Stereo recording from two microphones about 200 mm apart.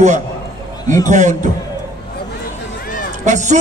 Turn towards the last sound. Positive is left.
turn(degrees=-35)  # may be behind; listen again after turning